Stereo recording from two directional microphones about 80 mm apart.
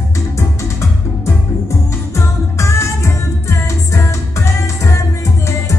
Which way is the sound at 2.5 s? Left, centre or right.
Left.